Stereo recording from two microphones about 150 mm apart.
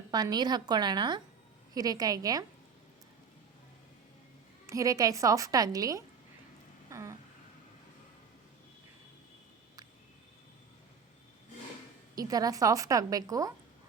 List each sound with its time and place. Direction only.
0.1 s a woman's voice: 25° right (ahead or behind)
4.6 s a woman's voice: 20° right (ahead or behind)
6.9 s a sound: 20° right (ahead or behind)
12.1 s a woman's voice: 25° right (ahead or behind)